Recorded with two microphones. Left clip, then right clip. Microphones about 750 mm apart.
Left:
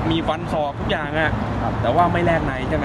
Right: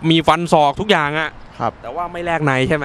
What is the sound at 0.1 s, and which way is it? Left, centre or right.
Speech, right.